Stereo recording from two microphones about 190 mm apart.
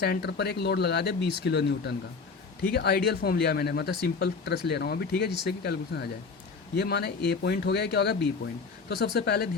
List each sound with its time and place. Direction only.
0.0 s speech: 60° left (ahead or behind)